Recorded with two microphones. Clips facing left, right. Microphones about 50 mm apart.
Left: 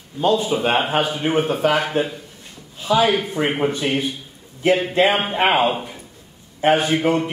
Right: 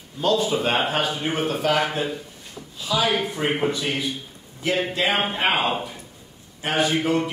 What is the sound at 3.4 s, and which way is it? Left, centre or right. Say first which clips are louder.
Speech: left 1 dB; centre.